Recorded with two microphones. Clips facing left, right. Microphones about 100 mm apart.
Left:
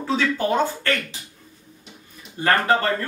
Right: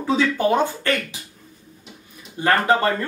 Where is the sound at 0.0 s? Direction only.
15° right (ahead or behind).